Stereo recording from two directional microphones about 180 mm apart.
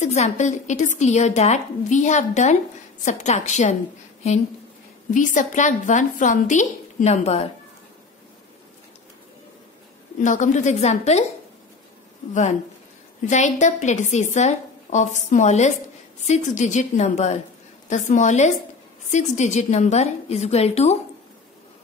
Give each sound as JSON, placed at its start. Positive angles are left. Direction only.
{"t": 0.0, "sound": "a woman's voice", "side_deg": 40}
{"t": 5.1, "sound": "a woman's voice", "side_deg": 45}
{"t": 10.2, "sound": "a woman's voice", "side_deg": 45}
{"t": 13.3, "sound": "a woman's voice", "side_deg": 40}